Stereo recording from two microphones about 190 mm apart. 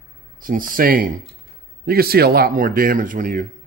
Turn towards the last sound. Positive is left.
turn(degrees=-45)  # may be behind; listen again after turning